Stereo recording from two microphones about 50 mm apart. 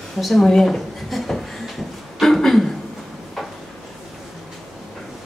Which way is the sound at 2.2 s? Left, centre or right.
Centre.